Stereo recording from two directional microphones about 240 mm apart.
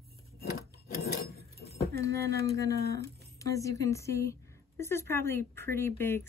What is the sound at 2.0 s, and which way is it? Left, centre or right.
Speech, centre.